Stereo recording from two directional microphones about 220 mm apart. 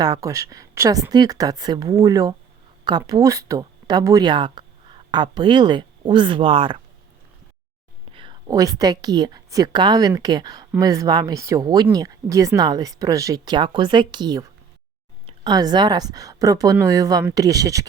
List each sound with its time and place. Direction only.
0.0 s speech: 15° right (ahead or behind)
8.1 s a woman's voice: 20° right (ahead or behind)